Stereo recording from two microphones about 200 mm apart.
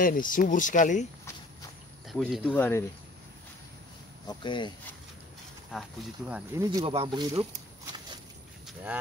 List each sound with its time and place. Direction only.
0.0 s speech: 45° left (ahead or behind)
2.0 s speech: centre (ahead or behind)
4.3 s speech: 25° left (ahead or behind)
5.7 s speech: centre (ahead or behind)
6.6 s speech: 15° right (ahead or behind)
6.9 s speech: 30° right (ahead or behind)
7.8 s a sound: 20° right (ahead or behind)